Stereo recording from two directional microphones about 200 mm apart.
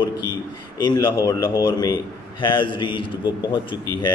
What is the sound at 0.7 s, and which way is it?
A man's voice, 20° left (ahead or behind).